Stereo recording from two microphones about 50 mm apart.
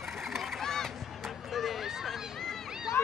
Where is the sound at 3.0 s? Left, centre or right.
Left.